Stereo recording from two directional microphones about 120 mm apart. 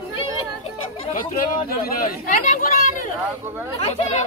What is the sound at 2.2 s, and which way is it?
Speech, 90° left.